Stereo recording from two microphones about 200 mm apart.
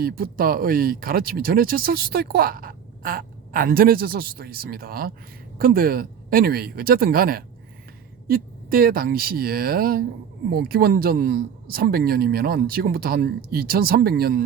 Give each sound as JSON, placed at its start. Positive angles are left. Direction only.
{"t": 0.0, "sound": "speech", "side_deg": -45}